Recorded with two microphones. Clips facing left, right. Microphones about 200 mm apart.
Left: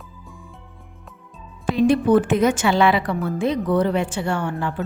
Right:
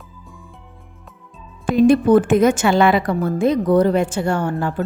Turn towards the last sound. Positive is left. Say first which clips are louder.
# right 4 dB
turn(degrees=-40)  # may be behind; listen again after turning